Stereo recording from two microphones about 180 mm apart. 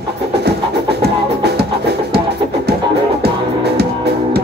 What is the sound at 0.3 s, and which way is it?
Music, 65° right (ahead or behind).